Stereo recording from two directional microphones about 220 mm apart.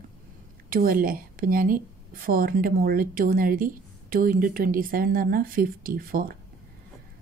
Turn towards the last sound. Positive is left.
turn(degrees=-40)  # may be behind; listen again after turning